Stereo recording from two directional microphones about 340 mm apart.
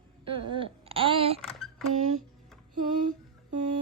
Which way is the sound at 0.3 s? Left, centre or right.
Right.